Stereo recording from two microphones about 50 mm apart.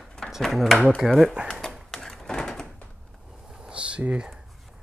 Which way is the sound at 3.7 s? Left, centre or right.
Right.